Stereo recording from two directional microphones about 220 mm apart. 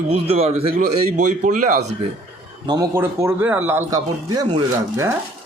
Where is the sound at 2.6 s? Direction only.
15° right (ahead or behind).